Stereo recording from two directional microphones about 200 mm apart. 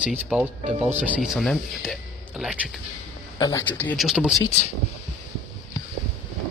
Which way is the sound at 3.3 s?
15° left (ahead or behind).